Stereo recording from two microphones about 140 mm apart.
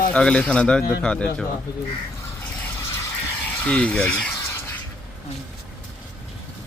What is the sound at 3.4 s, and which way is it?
Speech, 10° left (ahead or behind).